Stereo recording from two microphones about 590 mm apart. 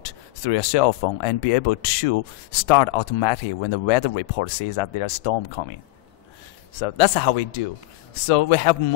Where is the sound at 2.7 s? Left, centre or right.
Left.